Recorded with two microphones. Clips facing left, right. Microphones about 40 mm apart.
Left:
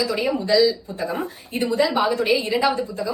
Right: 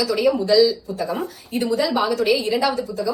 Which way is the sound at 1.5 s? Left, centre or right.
Left.